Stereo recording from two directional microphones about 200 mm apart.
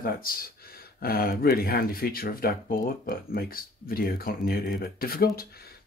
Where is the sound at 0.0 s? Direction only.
45° left (ahead or behind).